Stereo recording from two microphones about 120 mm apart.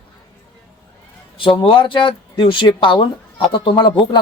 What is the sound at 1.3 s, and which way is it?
A woman's voice, 45° left (ahead or behind).